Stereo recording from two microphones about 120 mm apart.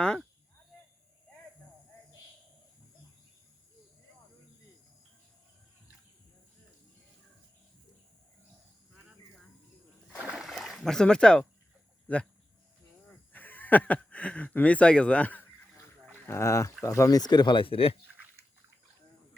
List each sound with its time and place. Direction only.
0.0 s speech: 5° left (ahead or behind)
10.2 s a sound: 5° right (ahead or behind)
12.0 s speech: 10° left (ahead or behind); by 17.9 s 50° left (ahead or behind)